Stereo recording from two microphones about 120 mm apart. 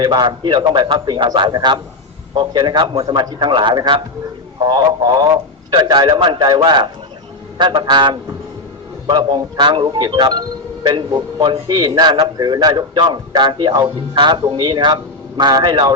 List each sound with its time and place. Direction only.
0.0 s a man's voice: 35° right (ahead or behind)